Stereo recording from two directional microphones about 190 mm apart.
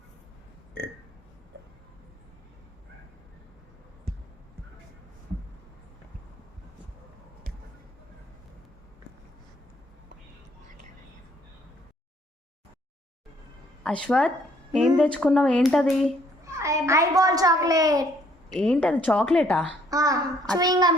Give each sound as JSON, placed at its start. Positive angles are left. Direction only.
{"t": 14.1, "sound": "speech", "side_deg": 5}
{"t": 16.4, "sound": "a child's voice", "side_deg": -15}
{"t": 18.5, "sound": "a woman's voice", "side_deg": 5}
{"t": 19.9, "sound": "a child's voice", "side_deg": -20}